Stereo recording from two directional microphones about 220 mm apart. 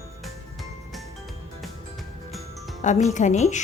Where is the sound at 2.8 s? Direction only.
35° left (ahead or behind).